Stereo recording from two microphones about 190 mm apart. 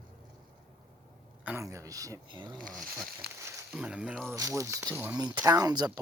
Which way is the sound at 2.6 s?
5° left (ahead or behind).